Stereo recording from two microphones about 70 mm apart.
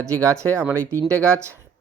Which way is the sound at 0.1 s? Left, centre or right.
Right.